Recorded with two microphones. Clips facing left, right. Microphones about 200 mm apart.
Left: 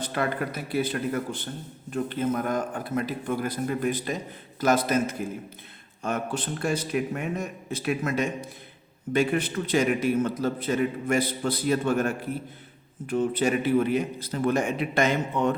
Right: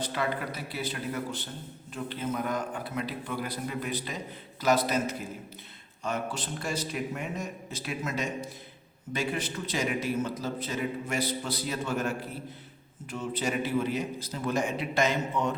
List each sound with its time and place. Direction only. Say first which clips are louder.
0.0 s a man's voice: left 3 dB; 50° left (ahead or behind)